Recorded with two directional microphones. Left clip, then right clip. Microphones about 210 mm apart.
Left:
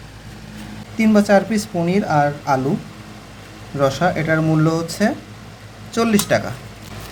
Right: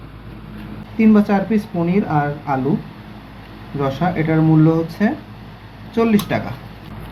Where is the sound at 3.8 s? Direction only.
45° left (ahead or behind).